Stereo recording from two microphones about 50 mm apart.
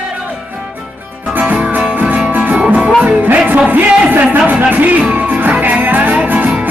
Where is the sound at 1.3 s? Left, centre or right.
Right.